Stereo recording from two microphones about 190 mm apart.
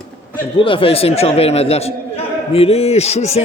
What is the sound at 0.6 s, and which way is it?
A man's voice, 30° left (ahead or behind).